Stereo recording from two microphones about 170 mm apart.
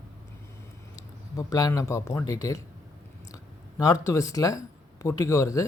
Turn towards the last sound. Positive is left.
turn(degrees=20)  # may be behind; listen again after turning